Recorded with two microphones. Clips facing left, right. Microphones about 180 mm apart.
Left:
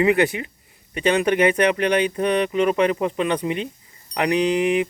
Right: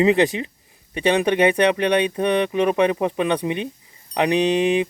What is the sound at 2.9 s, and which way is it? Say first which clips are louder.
Speech: right 1 dB; 20° right (ahead or behind).